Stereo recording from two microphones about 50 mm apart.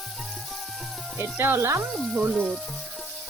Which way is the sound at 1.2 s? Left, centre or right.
Right.